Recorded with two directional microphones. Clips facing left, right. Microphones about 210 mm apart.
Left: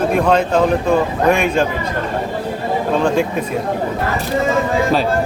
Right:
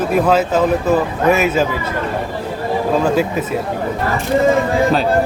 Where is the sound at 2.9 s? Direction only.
5° right (ahead or behind).